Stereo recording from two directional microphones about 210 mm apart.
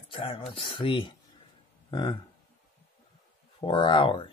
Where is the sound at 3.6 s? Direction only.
25° left (ahead or behind).